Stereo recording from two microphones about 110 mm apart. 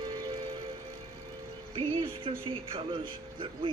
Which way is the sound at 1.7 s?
55° right (ahead or behind).